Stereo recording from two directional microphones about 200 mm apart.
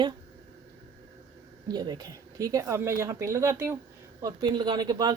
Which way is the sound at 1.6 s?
20° right (ahead or behind).